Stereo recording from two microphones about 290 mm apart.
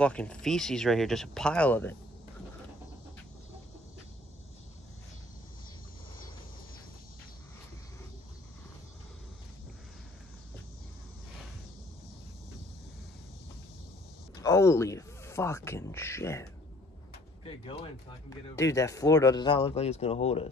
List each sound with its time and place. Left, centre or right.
0.0 s speech: centre
14.3 s a sound: centre
17.5 s speech: centre